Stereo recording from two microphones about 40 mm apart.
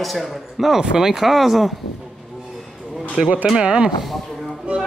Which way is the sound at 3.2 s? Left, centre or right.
Right.